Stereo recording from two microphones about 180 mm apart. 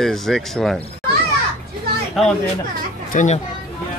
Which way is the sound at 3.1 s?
45° left (ahead or behind).